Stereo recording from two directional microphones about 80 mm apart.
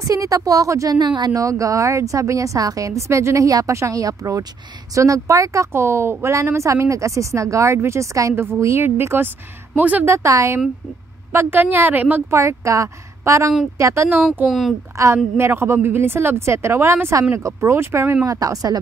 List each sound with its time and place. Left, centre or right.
0.0 s a woman's voice: right
0.9 s speech: right
1.3 s a woman's voice: right
10.0 s a woman's voice: right
11.3 s a woman's voice: right
12.3 s a woman's voice: right
14.4 s a woman's voice: centre
15.3 s a woman's voice: right
18.2 s a woman's voice: right